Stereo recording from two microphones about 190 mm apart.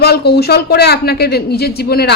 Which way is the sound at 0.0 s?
60° left (ahead or behind).